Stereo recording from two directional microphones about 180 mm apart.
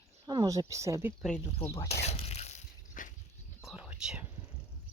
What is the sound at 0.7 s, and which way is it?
Speech, 15° right (ahead or behind).